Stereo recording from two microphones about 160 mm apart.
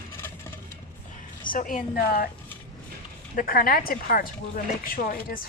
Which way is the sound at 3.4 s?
65° left (ahead or behind).